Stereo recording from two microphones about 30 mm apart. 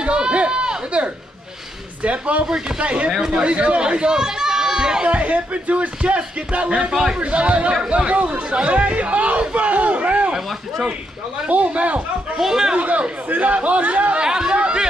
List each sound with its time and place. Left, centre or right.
0.0 s run: right
2.0 s speech: right
3.8 s speech: right
5.0 s speech: right
6.9 s speech: right
7.2 s speech: right
11.4 s speech: right
12.4 s speech: centre
12.7 s speech: right
14.2 s speech: right